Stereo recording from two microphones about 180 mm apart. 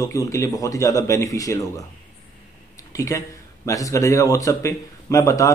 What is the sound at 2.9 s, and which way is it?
A man's voice, 15° left (ahead or behind).